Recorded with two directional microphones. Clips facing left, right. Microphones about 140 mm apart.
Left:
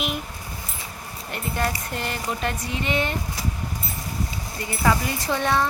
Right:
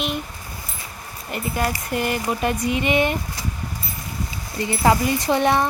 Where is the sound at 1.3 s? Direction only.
5° right (ahead or behind).